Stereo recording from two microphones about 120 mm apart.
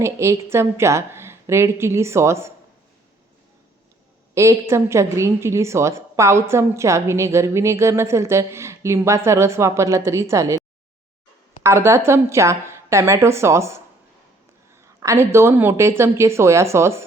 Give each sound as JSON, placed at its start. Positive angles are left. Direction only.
{"t": 0.0, "sound": "a woman's voice", "side_deg": -25}
{"t": 4.4, "sound": "a woman's voice", "side_deg": -25}
{"t": 11.6, "sound": "a woman's voice", "side_deg": -25}
{"t": 14.8, "sound": "a woman's voice", "side_deg": -25}